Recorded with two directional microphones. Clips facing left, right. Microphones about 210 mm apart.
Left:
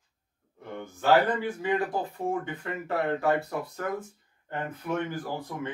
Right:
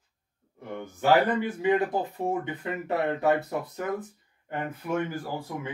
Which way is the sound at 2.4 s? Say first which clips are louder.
Right 2 dB; 20° right (ahead or behind).